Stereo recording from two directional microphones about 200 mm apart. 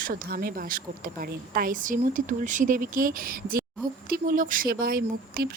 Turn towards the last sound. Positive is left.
turn(degrees=-50)  # may be behind; listen again after turning